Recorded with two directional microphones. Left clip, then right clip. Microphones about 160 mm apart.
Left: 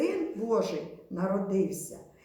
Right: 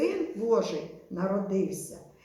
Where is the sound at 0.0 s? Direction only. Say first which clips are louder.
Right 2 dB; 20° left (ahead or behind).